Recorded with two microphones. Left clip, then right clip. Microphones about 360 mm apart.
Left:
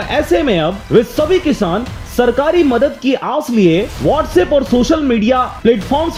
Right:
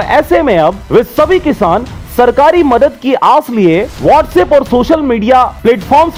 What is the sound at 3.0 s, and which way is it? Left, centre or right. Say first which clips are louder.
Speech: right 8 dB; right.